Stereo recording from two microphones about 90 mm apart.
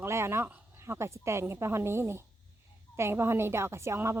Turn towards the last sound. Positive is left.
turn(degrees=-30)  # may be behind; listen again after turning